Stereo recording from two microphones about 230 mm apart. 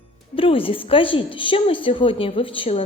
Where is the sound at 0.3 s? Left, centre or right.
Left.